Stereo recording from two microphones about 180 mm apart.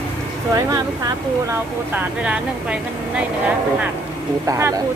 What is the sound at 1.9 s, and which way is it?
Speech, 5° right (ahead or behind).